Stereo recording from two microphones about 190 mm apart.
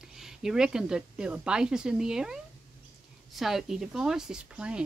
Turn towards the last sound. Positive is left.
turn(degrees=-5)  # may be behind; listen again after turning